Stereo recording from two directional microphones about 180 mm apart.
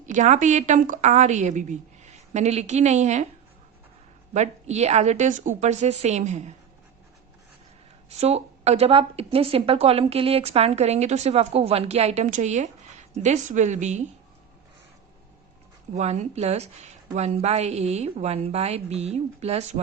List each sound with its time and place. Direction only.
0.0 s a woman's voice: 40° right (ahead or behind)
4.4 s a woman's voice: 40° right (ahead or behind)
8.1 s a woman's voice: 35° right (ahead or behind)
16.0 s a woman's voice: 40° right (ahead or behind)